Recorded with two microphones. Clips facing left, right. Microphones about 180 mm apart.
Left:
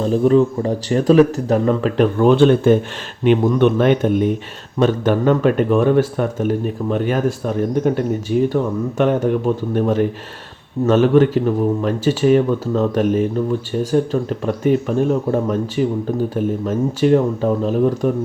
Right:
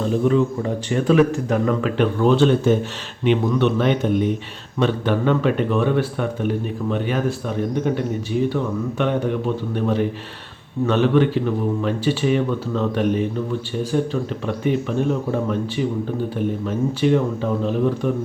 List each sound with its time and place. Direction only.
0.0 s speech: 35° left (ahead or behind)
2.2 s speech: 55° left (ahead or behind)